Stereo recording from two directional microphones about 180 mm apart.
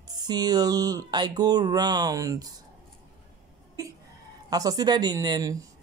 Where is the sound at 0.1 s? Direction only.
25° right (ahead or behind).